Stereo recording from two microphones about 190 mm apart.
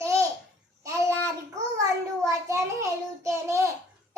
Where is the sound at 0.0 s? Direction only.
15° right (ahead or behind).